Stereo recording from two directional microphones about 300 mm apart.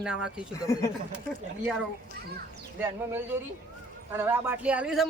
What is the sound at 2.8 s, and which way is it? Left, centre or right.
Speech, centre.